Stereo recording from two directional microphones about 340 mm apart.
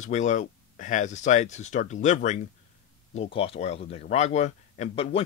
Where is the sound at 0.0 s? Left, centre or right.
Left.